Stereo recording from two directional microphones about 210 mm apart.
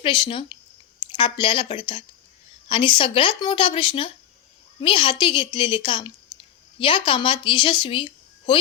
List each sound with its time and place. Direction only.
0.0 s speech: 25° left (ahead or behind)